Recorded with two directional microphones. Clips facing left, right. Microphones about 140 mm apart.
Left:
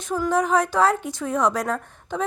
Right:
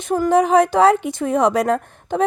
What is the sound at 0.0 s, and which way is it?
A woman's voice, 65° right (ahead or behind).